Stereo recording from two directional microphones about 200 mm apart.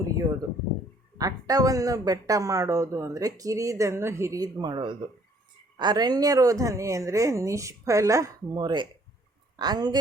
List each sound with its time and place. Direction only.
1.2 s a woman's voice: 20° right (ahead or behind)